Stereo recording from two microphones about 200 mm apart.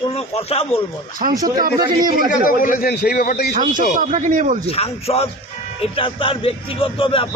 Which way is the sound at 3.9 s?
40° right (ahead or behind).